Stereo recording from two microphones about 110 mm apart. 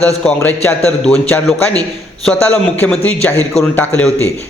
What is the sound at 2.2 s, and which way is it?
A man's voice, 15° left (ahead or behind).